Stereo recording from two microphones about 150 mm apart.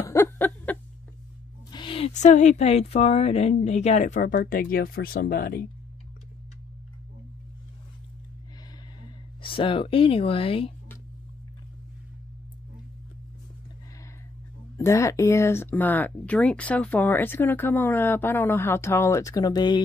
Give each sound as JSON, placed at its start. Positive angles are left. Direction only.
{"t": 0.0, "sound": "a sound", "side_deg": 15}
{"t": 1.7, "sound": "a woman's voice", "side_deg": 35}
{"t": 9.4, "sound": "speech", "side_deg": 35}
{"t": 14.8, "sound": "speech", "side_deg": 20}